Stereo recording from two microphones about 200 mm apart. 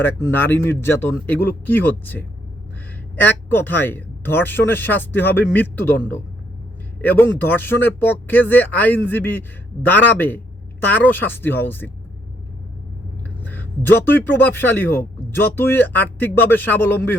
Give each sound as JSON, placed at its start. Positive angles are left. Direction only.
{"t": 0.0, "sound": "a man's voice", "side_deg": 10}
{"t": 3.2, "sound": "a man's voice", "side_deg": 10}
{"t": 13.4, "sound": "a man's voice", "side_deg": 10}